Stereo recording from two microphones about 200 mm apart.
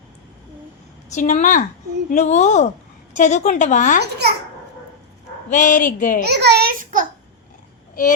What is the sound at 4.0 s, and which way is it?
Speech, 55° right (ahead or behind).